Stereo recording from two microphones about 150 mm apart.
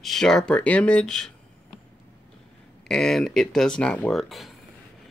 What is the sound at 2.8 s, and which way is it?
Speech, 5° left (ahead or behind).